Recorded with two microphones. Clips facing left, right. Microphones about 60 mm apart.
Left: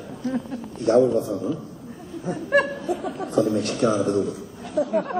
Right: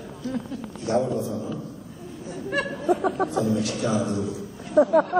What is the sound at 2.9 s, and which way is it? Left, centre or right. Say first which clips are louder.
Speech: right 4 dB; right.